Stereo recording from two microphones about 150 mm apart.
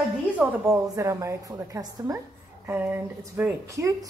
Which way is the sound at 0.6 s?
20° right (ahead or behind).